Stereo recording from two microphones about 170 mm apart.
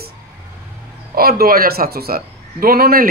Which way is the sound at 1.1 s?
60° right (ahead or behind).